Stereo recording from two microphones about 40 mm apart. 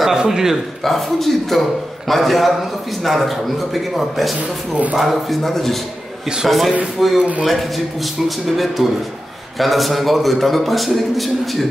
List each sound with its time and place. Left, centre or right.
0.1 s a man's voice: centre
0.8 s a man's voice: centre
4.4 s speech: right
4.9 s a man's voice: centre